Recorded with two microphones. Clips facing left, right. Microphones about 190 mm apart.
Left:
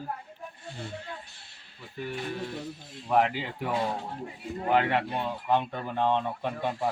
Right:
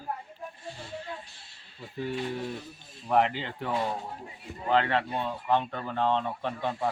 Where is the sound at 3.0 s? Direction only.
Centre (ahead or behind).